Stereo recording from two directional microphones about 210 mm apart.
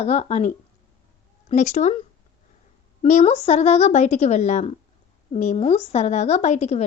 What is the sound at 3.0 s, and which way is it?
A woman's voice, 35° left (ahead or behind).